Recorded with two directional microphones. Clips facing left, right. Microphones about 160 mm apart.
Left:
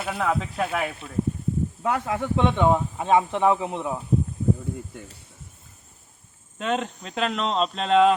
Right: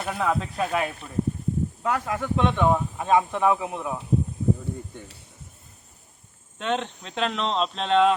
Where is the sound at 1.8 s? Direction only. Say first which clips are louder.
Left 2 dB; 25° left (ahead or behind).